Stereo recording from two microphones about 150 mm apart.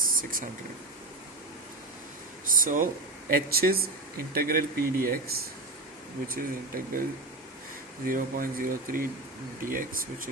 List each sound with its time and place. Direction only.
0.0 s a sound: 65° right (ahead or behind)
2.5 s speech: 65° right (ahead or behind)
6.2 s speech: 70° right (ahead or behind)
8.0 s speech: 70° right (ahead or behind)